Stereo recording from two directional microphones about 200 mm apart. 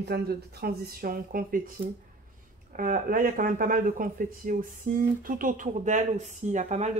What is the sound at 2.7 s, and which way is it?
Speech, 45° right (ahead or behind).